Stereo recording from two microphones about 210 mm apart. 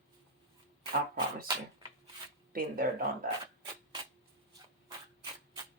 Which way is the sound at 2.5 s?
45° right (ahead or behind).